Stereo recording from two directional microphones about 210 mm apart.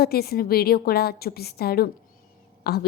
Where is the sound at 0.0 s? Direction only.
50° left (ahead or behind).